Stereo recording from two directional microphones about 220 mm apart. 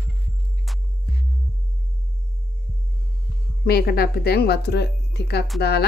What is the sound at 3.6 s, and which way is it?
Speech, 45° left (ahead or behind).